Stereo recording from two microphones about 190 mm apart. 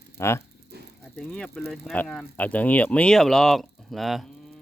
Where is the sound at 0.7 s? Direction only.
60° right (ahead or behind).